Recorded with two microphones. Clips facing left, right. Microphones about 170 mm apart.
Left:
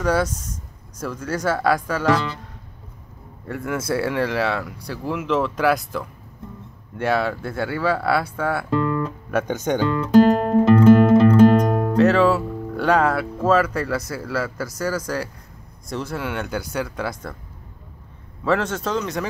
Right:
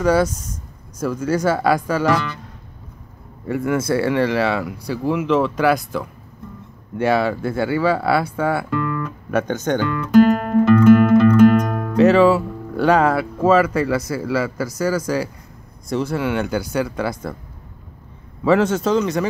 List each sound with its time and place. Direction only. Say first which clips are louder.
0.0 s speech: right 4 dB; centre (ahead or behind)
3.4 s speech: right 5 dB; centre (ahead or behind)
8.6 s speech: left 2 dB; 25° left (ahead or behind)
9.3 s speech: right 3 dB; 5° left (ahead or behind)
9.8 s music: right 1 dB; 25° left (ahead or behind)
12.0 s speech: right 4 dB; centre (ahead or behind)
18.4 s speech: right 6 dB; 5° right (ahead or behind)